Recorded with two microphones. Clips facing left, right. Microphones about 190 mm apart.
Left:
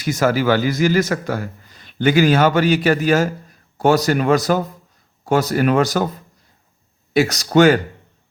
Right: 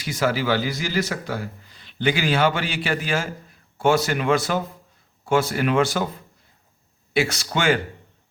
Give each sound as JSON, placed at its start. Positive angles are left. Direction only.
{"t": 0.0, "sound": "a man's voice", "side_deg": 45}
{"t": 7.1, "sound": "speech", "side_deg": 40}